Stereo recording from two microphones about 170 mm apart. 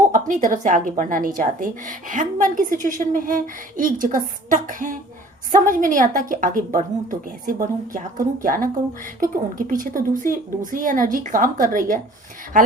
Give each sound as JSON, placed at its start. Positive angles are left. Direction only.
{"t": 0.1, "sound": "a woman's voice", "side_deg": -50}